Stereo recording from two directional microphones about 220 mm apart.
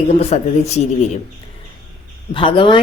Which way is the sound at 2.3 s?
25° left (ahead or behind).